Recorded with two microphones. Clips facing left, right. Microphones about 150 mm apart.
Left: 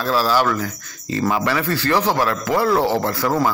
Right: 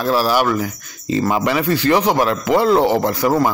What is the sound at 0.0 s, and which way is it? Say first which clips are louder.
Speech: right 2 dB; 15° right (ahead or behind).